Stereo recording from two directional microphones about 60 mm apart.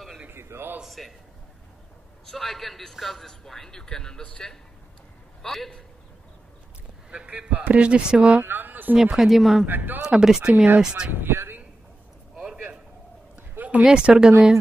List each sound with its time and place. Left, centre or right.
0.3 s a sound: right
0.8 s a man's voice: centre
2.2 s a man's voice: centre
7.1 s speech: centre
7.5 s speech: right
8.4 s a sound: right
8.9 s a man's voice: centre
9.7 s speech: right
10.0 s speech: centre
11.1 s speech: right
13.4 s a sound: right
13.8 s speech: centre